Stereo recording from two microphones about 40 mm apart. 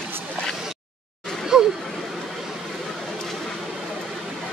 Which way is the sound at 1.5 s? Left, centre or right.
Centre.